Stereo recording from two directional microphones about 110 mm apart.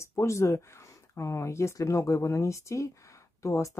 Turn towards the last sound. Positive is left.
turn(degrees=25)  # may be behind; listen again after turning